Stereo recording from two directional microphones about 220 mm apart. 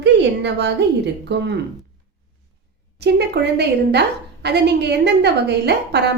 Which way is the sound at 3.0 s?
50° right (ahead or behind).